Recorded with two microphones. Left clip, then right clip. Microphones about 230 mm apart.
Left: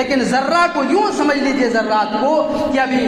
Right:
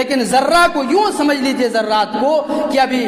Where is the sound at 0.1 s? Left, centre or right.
Right.